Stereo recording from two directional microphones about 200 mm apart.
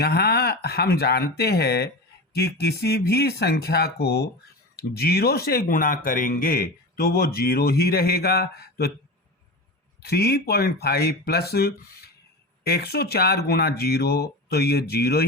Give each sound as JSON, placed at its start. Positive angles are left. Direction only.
{"t": 0.0, "sound": "speech", "side_deg": 50}
{"t": 10.0, "sound": "speech", "side_deg": 55}